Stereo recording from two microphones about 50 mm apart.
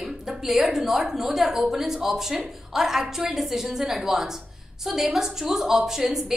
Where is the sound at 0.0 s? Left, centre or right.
Centre.